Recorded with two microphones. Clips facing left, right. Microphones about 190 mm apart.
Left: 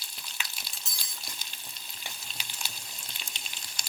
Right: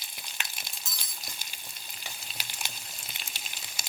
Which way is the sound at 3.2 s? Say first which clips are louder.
Right 1 dB; 5° right (ahead or behind).